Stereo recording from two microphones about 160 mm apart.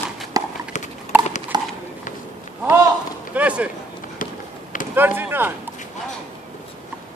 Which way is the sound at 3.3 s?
10° right (ahead or behind).